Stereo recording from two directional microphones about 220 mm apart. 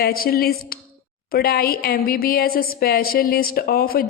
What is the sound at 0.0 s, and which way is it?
Speech, 45° left (ahead or behind).